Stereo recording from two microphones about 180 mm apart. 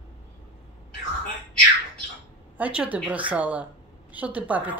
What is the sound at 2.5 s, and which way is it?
A woman's voice, 5° right (ahead or behind).